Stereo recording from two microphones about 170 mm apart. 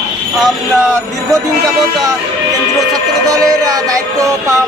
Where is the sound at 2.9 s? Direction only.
20° right (ahead or behind).